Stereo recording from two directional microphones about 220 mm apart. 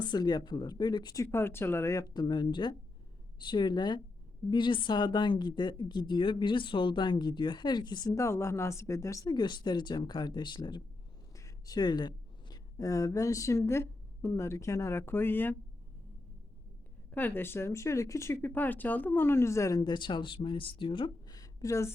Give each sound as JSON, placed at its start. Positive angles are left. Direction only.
{"t": 0.0, "sound": "speech", "side_deg": 20}
{"t": 17.1, "sound": "speech", "side_deg": 10}